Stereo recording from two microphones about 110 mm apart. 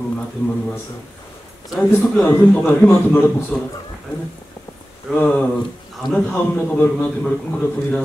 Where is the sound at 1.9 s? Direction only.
25° left (ahead or behind).